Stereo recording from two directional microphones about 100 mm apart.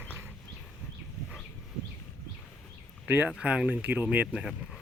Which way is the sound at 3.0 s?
20° right (ahead or behind).